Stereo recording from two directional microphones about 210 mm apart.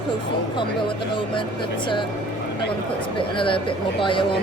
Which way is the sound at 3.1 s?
25° left (ahead or behind).